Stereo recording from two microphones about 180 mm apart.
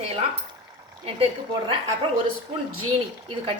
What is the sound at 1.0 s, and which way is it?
Speech, 30° right (ahead or behind).